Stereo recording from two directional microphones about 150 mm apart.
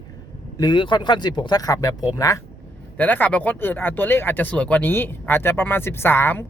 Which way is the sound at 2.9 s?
10° left (ahead or behind).